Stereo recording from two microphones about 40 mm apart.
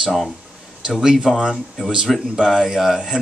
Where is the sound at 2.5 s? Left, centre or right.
Centre.